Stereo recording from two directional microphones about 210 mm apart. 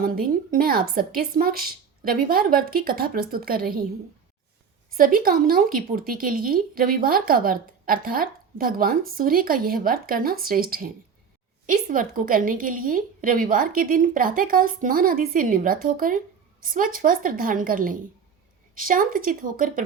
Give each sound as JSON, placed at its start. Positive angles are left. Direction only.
{"t": 0.0, "sound": "speech", "side_deg": -45}
{"t": 4.9, "sound": "a woman's voice", "side_deg": -45}